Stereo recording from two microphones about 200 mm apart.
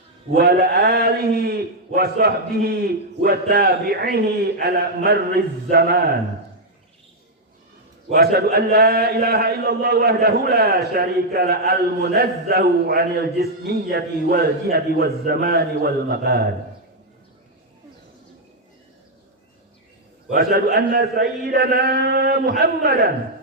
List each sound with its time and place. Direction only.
0.3 s a man's voice: 50° right (ahead or behind)
8.1 s a man's voice: 50° right (ahead or behind)
20.3 s a man's voice: 55° right (ahead or behind)